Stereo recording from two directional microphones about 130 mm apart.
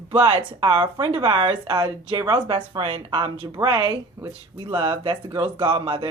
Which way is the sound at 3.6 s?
35° right (ahead or behind).